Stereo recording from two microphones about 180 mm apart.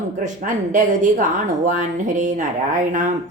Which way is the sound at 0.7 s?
45° right (ahead or behind).